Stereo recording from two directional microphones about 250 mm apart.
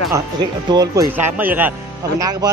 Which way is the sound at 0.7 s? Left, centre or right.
Centre.